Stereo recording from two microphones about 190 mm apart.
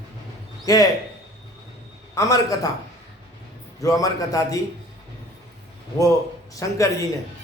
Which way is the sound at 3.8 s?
20° left (ahead or behind).